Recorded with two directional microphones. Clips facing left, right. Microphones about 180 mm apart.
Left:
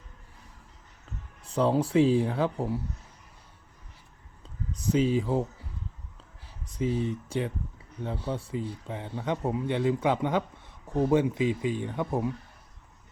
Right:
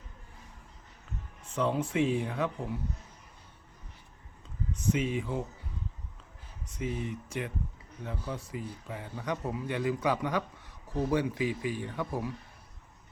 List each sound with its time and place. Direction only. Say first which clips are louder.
1.5 s speech: left 5 dB; 35° left (ahead or behind)
4.7 s speech: left 5 dB; 35° left (ahead or behind)
6.7 s speech: left 6 dB; 30° left (ahead or behind)